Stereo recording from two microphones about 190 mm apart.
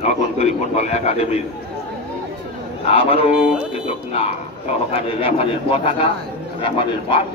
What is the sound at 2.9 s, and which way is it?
Speech, 30° left (ahead or behind).